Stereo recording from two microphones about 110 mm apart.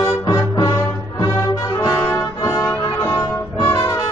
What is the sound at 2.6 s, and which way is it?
Music, 20° left (ahead or behind).